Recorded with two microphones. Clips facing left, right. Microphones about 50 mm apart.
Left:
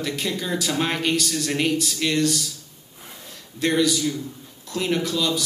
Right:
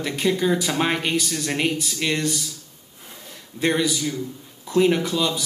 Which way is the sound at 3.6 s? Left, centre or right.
Centre.